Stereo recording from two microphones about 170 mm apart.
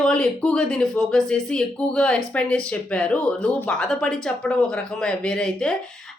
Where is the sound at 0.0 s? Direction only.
5° left (ahead or behind).